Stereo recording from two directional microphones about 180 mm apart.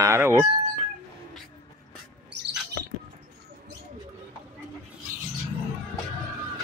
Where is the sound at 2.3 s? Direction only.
75° right (ahead or behind).